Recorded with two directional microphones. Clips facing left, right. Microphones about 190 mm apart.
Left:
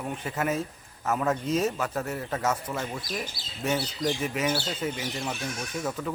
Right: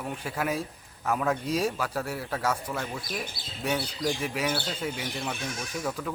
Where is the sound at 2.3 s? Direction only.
5° left (ahead or behind).